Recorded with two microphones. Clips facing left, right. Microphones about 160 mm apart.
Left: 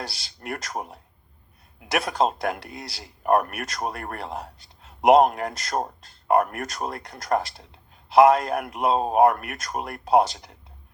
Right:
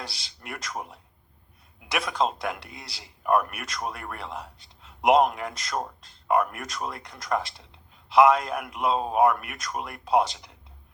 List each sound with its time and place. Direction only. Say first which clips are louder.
0.3 s speech: left 5 dB; 50° left (ahead or behind)
2.0 s speech: left 3 dB; 45° left (ahead or behind)